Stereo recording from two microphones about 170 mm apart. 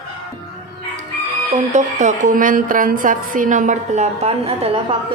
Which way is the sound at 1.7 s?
45° right (ahead or behind).